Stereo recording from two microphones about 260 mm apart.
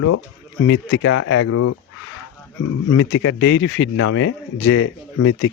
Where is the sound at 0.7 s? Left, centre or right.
Left.